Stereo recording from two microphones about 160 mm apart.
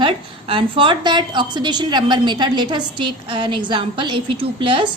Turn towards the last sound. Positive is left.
turn(degrees=-35)  # may be behind; listen again after turning